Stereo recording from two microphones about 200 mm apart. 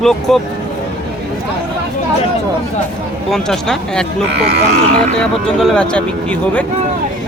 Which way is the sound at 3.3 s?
Centre (ahead or behind).